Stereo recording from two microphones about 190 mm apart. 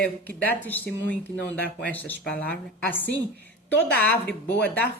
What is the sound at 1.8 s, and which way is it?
Speech, 10° left (ahead or behind).